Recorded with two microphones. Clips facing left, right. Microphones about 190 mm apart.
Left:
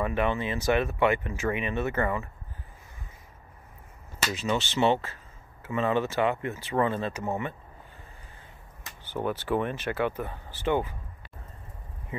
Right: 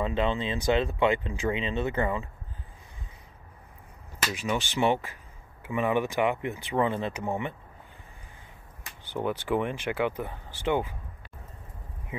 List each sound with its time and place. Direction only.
0.0 s speech: 20° right (ahead or behind)
4.4 s speech: 15° right (ahead or behind)
9.1 s speech: 15° right (ahead or behind)